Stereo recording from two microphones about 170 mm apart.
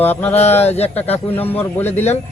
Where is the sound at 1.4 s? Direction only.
10° left (ahead or behind).